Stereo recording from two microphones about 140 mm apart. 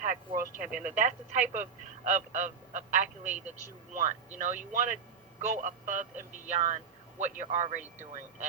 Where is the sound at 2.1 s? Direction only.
60° right (ahead or behind).